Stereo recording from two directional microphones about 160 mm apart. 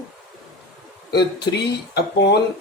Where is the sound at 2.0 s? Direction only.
90° left.